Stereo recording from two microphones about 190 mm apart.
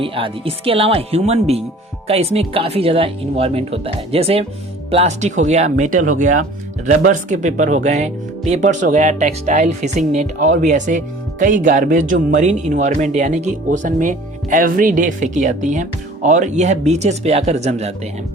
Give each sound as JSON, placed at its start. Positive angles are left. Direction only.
{"t": 0.0, "sound": "speech", "side_deg": -30}